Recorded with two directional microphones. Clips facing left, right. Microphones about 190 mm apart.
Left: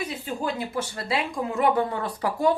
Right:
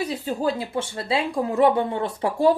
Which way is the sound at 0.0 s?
30° right (ahead or behind).